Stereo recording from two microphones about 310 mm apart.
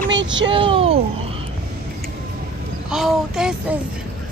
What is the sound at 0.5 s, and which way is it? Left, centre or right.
Speech, centre.